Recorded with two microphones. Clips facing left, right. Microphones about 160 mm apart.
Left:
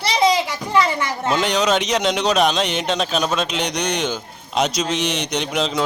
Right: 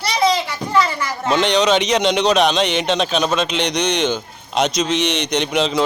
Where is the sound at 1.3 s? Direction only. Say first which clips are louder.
Right 3 dB; 5° left (ahead or behind).